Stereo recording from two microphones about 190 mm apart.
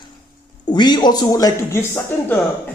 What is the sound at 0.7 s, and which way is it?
Speech, 20° left (ahead or behind).